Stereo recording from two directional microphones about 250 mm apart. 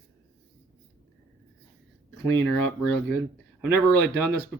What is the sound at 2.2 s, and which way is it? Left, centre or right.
Speech, centre.